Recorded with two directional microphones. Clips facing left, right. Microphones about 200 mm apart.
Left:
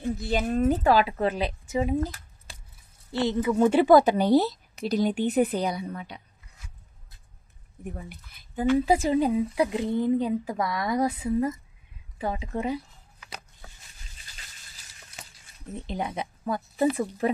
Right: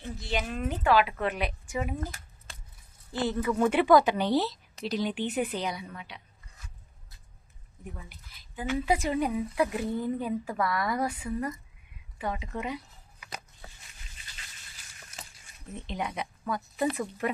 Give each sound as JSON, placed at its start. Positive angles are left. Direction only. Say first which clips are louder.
{"t": 0.0, "sound": "speech", "louder": "left 6 dB", "side_deg": 40}
{"t": 3.1, "sound": "speech", "louder": "left 4 dB", "side_deg": 70}
{"t": 3.3, "sound": "speech", "louder": "left 5 dB", "side_deg": 25}
{"t": 8.1, "sound": "speech", "louder": "left 8 dB", "side_deg": 50}
{"t": 8.8, "sound": "a woman's voice", "louder": "left 5 dB", "side_deg": 30}
{"t": 13.2, "sound": "a sound", "louder": "even", "side_deg": -5}
{"t": 16.0, "sound": "a woman's voice", "louder": "left 2 dB", "side_deg": 30}